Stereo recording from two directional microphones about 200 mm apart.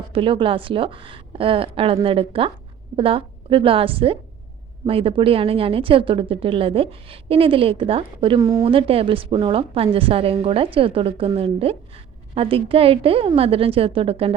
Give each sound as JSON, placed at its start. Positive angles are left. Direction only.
{"t": 0.1, "sound": "a woman's voice", "side_deg": -25}